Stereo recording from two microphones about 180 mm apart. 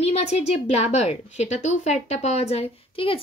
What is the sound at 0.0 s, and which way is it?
A woman's voice, 35° left (ahead or behind).